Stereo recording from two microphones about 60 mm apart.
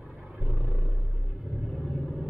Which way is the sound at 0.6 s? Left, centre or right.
Left.